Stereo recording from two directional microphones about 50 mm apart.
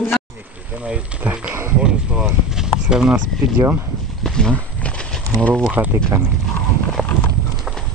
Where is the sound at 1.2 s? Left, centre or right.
Right.